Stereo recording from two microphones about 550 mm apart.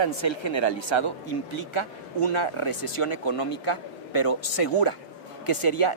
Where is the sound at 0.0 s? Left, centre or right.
Left.